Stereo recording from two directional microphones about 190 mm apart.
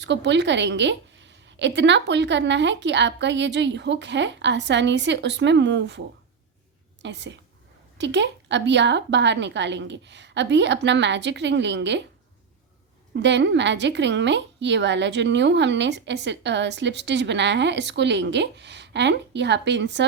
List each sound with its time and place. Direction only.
0.0 s a woman's voice: 70° right (ahead or behind)
7.0 s a woman's voice: 70° right (ahead or behind)
13.1 s a woman's voice: 65° right (ahead or behind)